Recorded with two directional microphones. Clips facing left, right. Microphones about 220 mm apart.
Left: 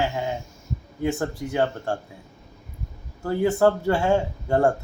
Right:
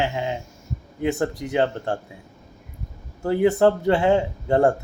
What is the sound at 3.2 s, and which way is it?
Speech, 20° right (ahead or behind).